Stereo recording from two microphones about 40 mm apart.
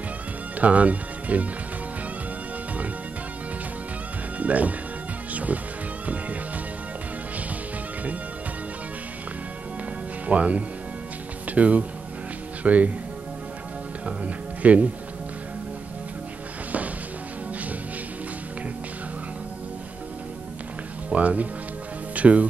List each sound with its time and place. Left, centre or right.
0.6 s speech: right
4.4 s speech: right
5.3 s music: right
10.2 s speech: right
14.0 s speech: right
21.1 s speech: right